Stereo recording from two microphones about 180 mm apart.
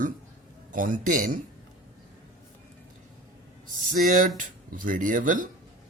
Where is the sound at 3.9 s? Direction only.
50° right (ahead or behind).